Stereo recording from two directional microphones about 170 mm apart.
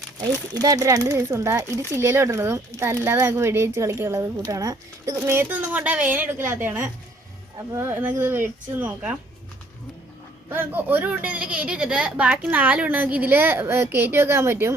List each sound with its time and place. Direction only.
0.6 s speech: 20° right (ahead or behind)
10.5 s speech: 10° right (ahead or behind)